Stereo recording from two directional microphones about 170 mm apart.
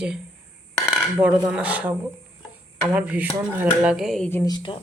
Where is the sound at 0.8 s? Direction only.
5° right (ahead or behind).